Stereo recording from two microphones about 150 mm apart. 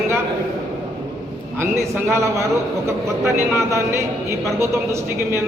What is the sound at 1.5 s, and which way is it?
A man's voice, 20° right (ahead or behind).